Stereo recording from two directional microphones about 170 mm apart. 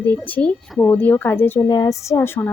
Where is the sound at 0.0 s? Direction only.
10° left (ahead or behind).